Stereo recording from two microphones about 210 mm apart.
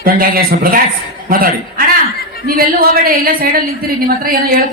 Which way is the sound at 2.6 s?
45° right (ahead or behind).